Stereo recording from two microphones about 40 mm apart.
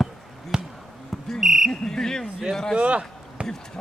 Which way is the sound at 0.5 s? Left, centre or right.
Centre.